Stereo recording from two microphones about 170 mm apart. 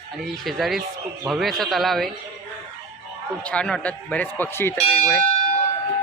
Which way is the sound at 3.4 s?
5° left (ahead or behind).